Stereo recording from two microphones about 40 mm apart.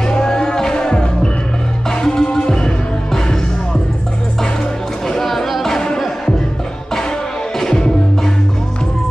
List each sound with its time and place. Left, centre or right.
0.0 s music: centre
5.0 s music: centre
7.5 s music: centre